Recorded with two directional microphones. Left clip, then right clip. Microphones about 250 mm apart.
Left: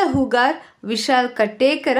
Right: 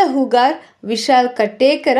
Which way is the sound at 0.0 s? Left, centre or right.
Centre.